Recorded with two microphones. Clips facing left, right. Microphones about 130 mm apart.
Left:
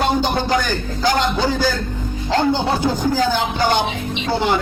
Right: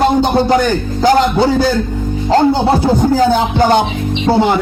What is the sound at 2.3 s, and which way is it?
Music, 30° right (ahead or behind).